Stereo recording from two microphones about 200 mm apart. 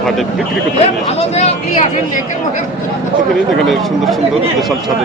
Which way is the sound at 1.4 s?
30° left (ahead or behind).